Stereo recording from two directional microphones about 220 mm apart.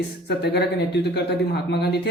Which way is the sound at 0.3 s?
50° left (ahead or behind).